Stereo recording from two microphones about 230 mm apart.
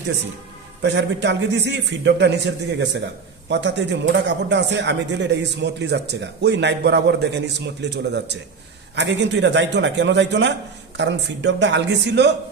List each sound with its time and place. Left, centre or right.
0.8 s a man's voice: right